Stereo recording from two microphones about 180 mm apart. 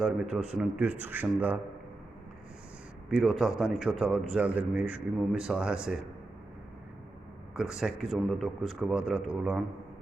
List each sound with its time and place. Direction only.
0.0 s a man's voice: 5° right (ahead or behind)
3.1 s speech: centre (ahead or behind)
7.5 s a man's voice: 5° right (ahead or behind)